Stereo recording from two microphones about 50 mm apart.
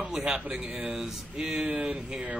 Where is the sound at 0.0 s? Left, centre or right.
Centre.